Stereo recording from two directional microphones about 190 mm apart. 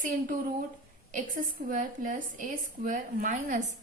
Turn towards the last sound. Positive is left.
turn(degrees=-45)  # may be behind; listen again after turning